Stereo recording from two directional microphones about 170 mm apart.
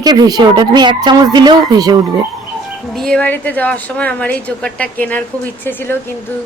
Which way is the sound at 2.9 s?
5° left (ahead or behind).